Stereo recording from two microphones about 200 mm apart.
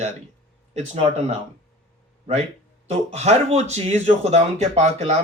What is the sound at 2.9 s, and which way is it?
Speech, 35° right (ahead or behind).